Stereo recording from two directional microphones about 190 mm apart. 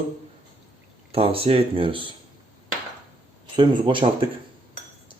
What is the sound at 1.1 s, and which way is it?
Speech, 30° right (ahead or behind).